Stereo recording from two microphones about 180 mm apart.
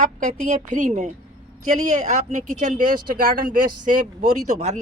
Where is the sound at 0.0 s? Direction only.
45° right (ahead or behind).